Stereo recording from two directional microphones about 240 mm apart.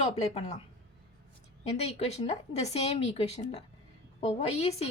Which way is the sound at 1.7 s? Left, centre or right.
Left.